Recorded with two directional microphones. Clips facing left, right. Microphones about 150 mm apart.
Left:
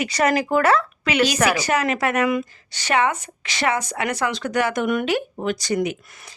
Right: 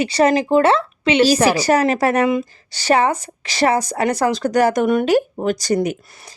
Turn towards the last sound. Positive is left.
turn(degrees=-40)  # may be behind; listen again after turning